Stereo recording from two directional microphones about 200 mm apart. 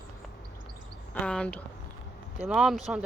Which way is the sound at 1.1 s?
5° left (ahead or behind).